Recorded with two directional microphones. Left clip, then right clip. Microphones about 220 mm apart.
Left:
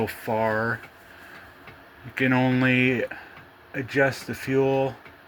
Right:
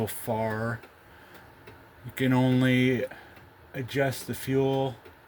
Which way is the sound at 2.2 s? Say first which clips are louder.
Left 3 dB; 45° right (ahead or behind).